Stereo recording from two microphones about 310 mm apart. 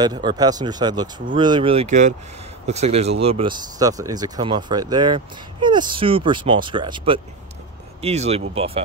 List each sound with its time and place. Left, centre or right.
0.0 s speech: centre